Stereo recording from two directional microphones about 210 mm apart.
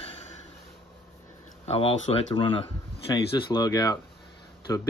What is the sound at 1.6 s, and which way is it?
Speech, 30° left (ahead or behind).